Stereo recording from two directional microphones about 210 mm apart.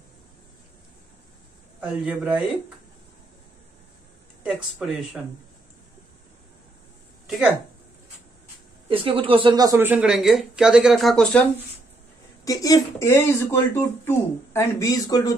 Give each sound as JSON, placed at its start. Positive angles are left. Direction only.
{"t": 1.8, "sound": "speech", "side_deg": -5}
{"t": 4.4, "sound": "speech", "side_deg": -5}
{"t": 8.8, "sound": "speech", "side_deg": -25}
{"t": 12.4, "sound": "speech", "side_deg": 15}